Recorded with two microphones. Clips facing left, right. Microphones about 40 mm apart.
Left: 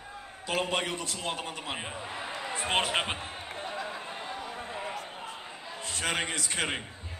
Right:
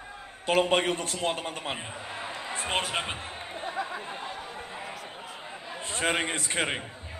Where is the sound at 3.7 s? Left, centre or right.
Centre.